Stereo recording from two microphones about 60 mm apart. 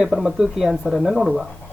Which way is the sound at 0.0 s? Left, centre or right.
Centre.